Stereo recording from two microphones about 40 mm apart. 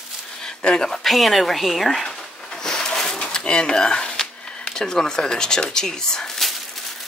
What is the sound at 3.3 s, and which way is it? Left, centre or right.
Speech, centre.